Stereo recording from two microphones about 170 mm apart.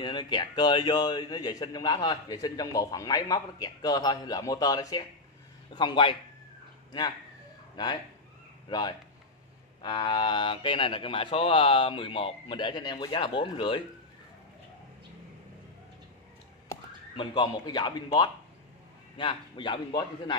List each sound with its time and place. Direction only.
0.0 s speech: 25° left (ahead or behind)
7.7 s speech: 25° left (ahead or behind)
17.2 s speech: 30° left (ahead or behind)